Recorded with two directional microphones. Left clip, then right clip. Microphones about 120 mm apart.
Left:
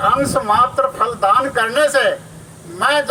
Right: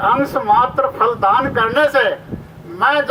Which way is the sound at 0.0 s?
30° right (ahead or behind).